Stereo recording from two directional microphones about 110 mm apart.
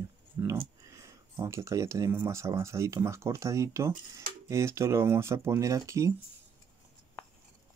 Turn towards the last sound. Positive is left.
turn(degrees=-30)  # may be behind; listen again after turning